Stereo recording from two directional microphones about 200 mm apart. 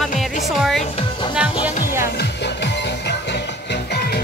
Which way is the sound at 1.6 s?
10° right (ahead or behind).